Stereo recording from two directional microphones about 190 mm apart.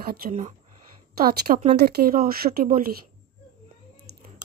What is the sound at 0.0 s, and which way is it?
A woman's voice, 50° right (ahead or behind).